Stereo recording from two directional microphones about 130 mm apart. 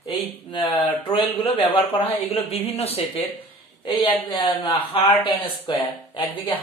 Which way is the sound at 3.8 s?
40° left (ahead or behind).